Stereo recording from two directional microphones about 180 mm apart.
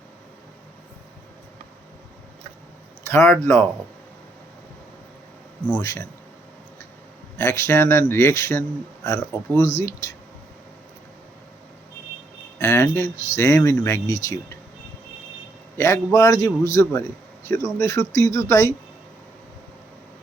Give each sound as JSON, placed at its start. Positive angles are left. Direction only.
{"t": 3.0, "sound": "speech", "side_deg": 15}
{"t": 5.6, "sound": "a man's voice", "side_deg": 10}
{"t": 7.3, "sound": "a man's voice", "side_deg": 15}
{"t": 12.5, "sound": "a man's voice", "side_deg": 15}
{"t": 15.8, "sound": "a man's voice", "side_deg": 15}